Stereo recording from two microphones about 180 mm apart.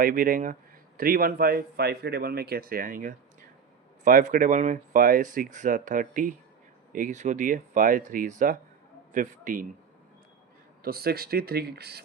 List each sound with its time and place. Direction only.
0.0 s speech: 50° right (ahead or behind)
10.8 s speech: 60° right (ahead or behind)